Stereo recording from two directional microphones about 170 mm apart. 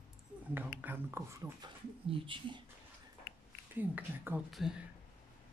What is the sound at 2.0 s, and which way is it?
Speech, 30° right (ahead or behind).